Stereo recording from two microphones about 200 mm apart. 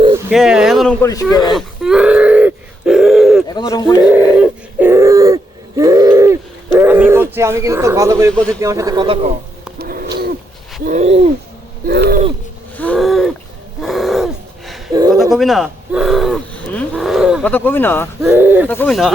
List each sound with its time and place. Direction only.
0.3 s speech: centre (ahead or behind)
1.0 s speech: 15° left (ahead or behind)
1.5 s groan: 5° right (ahead or behind)
3.5 s speech: 20° left (ahead or behind)
4.0 s a sound: 5° right (ahead or behind)
8.6 s a man's voice: 15° right (ahead or behind)
9.7 s a sound: 50° right (ahead or behind)
10.8 s hoot: 35° right (ahead or behind)
11.9 s a sound: 50° right (ahead or behind)
12.7 s a sound: 10° left (ahead or behind)
17.4 s speech: 10° left (ahead or behind)
18.2 s a man's voice: 10° right (ahead or behind)
18.7 s speech: 10° left (ahead or behind)